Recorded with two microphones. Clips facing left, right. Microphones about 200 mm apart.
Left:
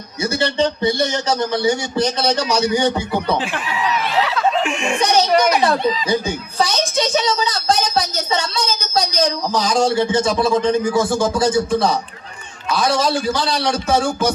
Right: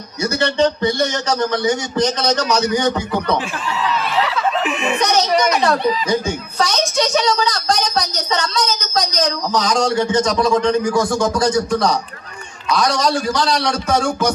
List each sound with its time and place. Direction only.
0.3 s a woman's voice: 10° left (ahead or behind)
4.4 s chuckle: 5° right (ahead or behind)
5.0 s a woman's voice: 10° left (ahead or behind)
6.9 s a woman's voice: 25° left (ahead or behind)
7.4 s a woman's voice: 5° left (ahead or behind)